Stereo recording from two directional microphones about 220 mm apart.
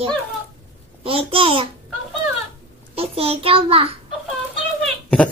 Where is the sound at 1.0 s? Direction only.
25° right (ahead or behind).